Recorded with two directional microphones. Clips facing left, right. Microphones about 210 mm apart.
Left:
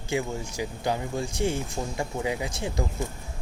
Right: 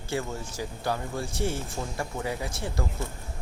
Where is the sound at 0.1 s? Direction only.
15° left (ahead or behind).